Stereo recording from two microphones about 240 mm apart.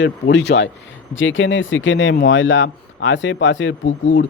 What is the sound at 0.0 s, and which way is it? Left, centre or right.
Speech, left.